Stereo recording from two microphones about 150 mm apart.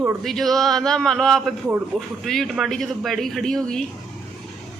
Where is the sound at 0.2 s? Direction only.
Centre (ahead or behind).